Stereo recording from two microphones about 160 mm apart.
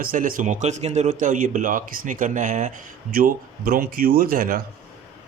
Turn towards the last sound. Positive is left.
turn(degrees=-60)  # may be behind; listen again after turning